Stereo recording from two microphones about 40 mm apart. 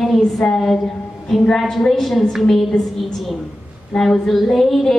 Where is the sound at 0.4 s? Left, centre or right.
Centre.